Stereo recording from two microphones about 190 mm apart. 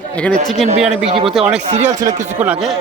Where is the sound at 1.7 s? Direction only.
35° right (ahead or behind).